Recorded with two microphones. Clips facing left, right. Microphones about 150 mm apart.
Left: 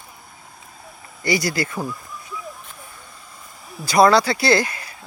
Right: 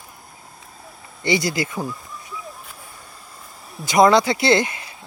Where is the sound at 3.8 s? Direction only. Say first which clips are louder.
Even; 20° right (ahead or behind).